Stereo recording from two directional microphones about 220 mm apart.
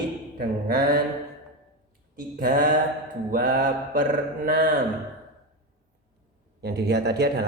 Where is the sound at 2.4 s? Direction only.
40° right (ahead or behind).